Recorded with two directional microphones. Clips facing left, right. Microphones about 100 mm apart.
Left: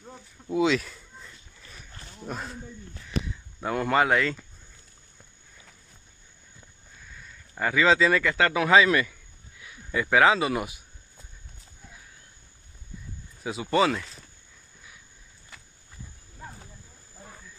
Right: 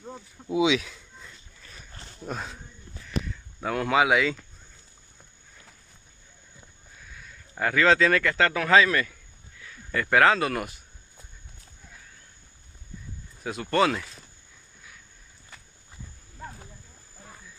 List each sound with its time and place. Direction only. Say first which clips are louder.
0.0 s speech: right 4 dB; 10° right (ahead or behind)
7.2 s speech: right 1 dB; centre (ahead or behind)
13.4 s speech: even; 5° left (ahead or behind)